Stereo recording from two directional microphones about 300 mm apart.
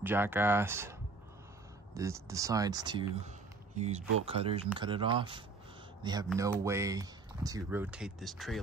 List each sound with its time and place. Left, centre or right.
0.0 s speech: centre
2.0 s speech: centre